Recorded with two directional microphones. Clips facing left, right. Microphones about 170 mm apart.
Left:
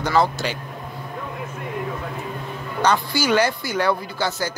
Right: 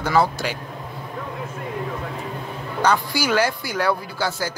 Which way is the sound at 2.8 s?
10° right (ahead or behind).